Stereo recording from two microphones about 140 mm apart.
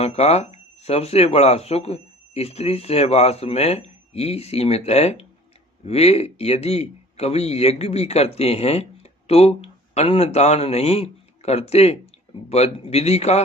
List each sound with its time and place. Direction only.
0.0 s a man's voice: 50° left (ahead or behind)